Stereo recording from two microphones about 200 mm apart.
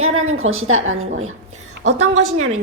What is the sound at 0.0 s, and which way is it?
A woman's voice, 90° right.